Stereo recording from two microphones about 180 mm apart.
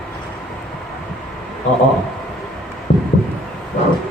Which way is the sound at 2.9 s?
40° left (ahead or behind).